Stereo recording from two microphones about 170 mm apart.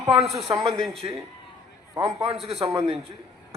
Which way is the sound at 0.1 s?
35° right (ahead or behind).